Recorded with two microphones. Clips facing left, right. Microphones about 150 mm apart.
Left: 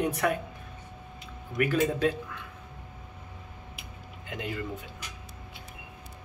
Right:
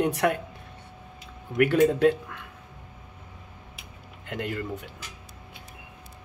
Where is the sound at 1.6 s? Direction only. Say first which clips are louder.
Right 6 dB; 65° right (ahead or behind).